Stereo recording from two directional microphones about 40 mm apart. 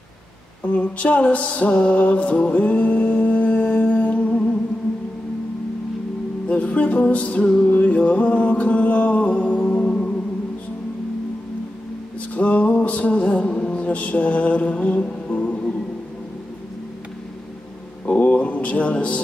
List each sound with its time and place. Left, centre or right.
0.7 s music: left
6.4 s music: left
7.6 s music: left
12.4 s music: left
18.0 s a sound: left